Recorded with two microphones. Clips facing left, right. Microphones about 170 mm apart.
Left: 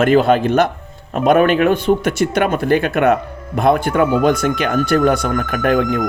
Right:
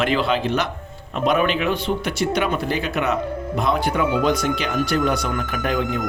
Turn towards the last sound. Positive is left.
turn(degrees=55)  # may be behind; listen again after turning